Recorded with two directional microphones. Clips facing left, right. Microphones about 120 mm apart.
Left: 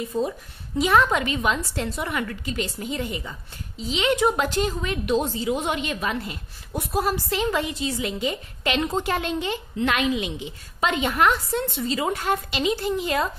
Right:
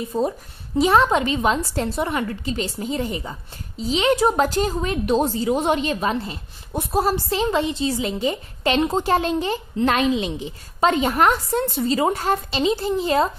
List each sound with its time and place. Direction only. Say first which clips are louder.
0.1 s a woman's voice: right 4 dB; 35° right (ahead or behind)